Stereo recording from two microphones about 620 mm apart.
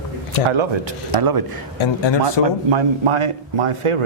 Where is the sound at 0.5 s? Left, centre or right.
Right.